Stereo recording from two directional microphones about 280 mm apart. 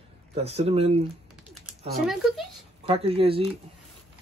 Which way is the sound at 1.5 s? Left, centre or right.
Centre.